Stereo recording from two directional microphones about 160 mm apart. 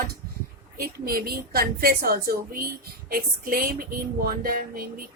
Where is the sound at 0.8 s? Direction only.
70° right (ahead or behind).